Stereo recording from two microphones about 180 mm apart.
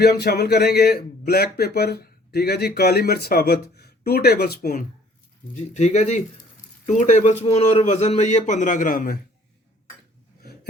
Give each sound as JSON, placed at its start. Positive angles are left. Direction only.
{"t": 0.0, "sound": "a man's voice", "side_deg": 70}
{"t": 5.7, "sound": "a man's voice", "side_deg": 40}